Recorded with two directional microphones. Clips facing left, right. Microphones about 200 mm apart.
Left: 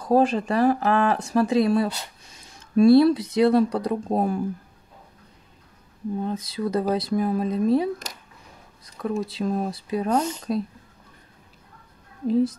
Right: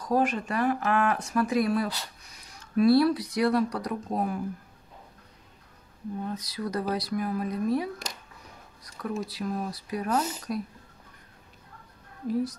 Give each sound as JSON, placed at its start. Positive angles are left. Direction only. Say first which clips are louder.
{"t": 0.0, "sound": "speech", "louder": "left 6 dB", "side_deg": 30}
{"t": 6.2, "sound": "speech", "louder": "left 5 dB", "side_deg": 25}
{"t": 9.0, "sound": "speech", "louder": "left 6 dB", "side_deg": 25}
{"t": 12.3, "sound": "speech", "louder": "left 7 dB", "side_deg": 25}